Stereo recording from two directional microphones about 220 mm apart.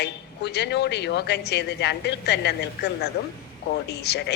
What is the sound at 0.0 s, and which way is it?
A man's voice, 50° left (ahead or behind).